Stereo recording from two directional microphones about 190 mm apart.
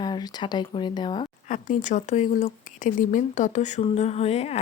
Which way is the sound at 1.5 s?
40° left (ahead or behind).